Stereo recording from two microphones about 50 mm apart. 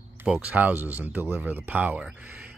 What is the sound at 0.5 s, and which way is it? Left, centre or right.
Speech, right.